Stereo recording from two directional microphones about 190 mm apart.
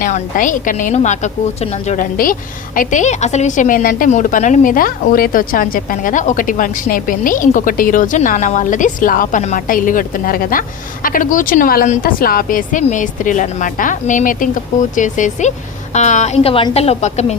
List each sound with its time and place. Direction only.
0.0 s a woman's voice: 45° left (ahead or behind)